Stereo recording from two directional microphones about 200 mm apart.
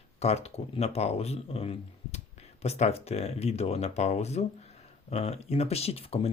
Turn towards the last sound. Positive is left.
turn(degrees=30)  # may be behind; listen again after turning